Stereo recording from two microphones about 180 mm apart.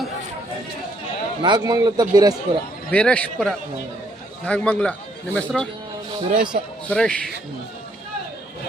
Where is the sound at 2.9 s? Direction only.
5° left (ahead or behind).